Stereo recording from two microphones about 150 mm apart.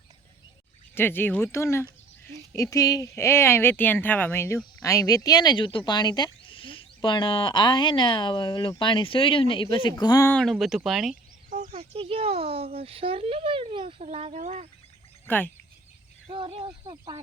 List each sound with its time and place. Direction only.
0.9 s speech: 15° left (ahead or behind); by 9.9 s 35° left (ahead or behind)
10.0 s speech: 25° left (ahead or behind)
10.3 s speech: centre (ahead or behind)
11.4 s a sound: 60° right (ahead or behind)
11.7 s speech: 40° right (ahead or behind)
15.3 s speech: 15° left (ahead or behind)
16.3 s speech: 40° right (ahead or behind)
16.8 s speech: 25° right (ahead or behind)